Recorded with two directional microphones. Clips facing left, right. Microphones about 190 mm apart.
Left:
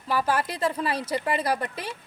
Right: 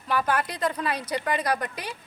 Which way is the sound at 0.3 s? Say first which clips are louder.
Left 1 dB; 30° left (ahead or behind).